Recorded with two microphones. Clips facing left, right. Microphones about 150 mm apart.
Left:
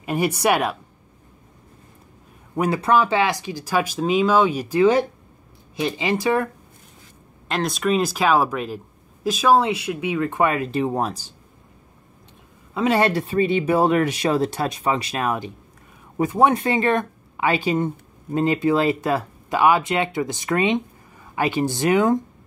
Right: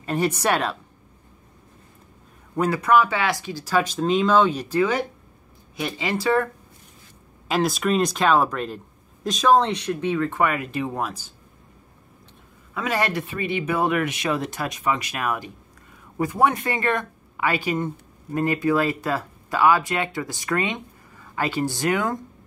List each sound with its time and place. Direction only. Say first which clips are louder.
0.0 s speech: left 2 dB; 10° left (ahead or behind)
2.5 s a man's voice: left 1 dB; 15° left (ahead or behind)
2.8 s speech: left 1 dB; 30° left (ahead or behind)
7.4 s speech: even; centre (ahead or behind); by 11.1 s 35° left (ahead or behind)
12.7 s speech: left 6 dB; 25° left (ahead or behind)